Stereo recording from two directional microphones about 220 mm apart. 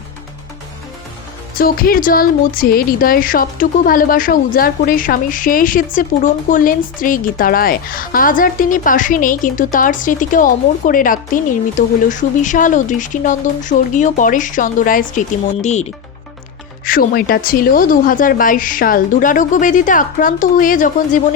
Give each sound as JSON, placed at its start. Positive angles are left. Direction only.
{"t": 1.5, "sound": "speech", "side_deg": 40}